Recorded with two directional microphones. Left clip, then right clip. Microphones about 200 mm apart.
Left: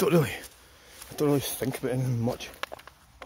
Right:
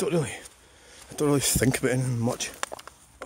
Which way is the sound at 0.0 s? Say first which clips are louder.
Left 3 dB; 10° left (ahead or behind).